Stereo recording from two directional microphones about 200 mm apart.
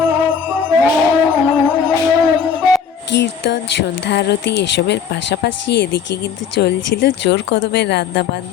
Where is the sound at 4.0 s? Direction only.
60° left (ahead or behind).